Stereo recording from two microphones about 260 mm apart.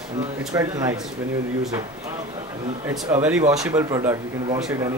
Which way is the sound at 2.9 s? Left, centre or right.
Centre.